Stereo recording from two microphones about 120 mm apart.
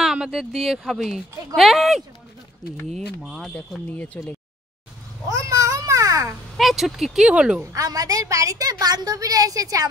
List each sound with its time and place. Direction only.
0.0 s speech: 5° right (ahead or behind)
3.5 s speech: 10° left (ahead or behind)
5.3 s a sound: 25° right (ahead or behind)
6.5 s speech: centre (ahead or behind)
7.6 s a woman's voice: 30° right (ahead or behind)